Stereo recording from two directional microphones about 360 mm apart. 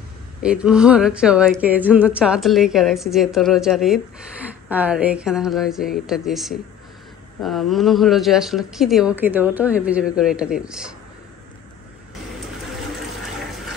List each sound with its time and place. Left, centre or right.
0.4 s a woman's voice: centre